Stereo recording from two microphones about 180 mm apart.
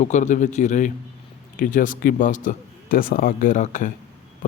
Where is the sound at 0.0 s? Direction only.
40° left (ahead or behind).